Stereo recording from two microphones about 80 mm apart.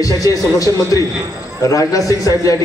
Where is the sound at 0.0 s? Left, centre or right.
Left.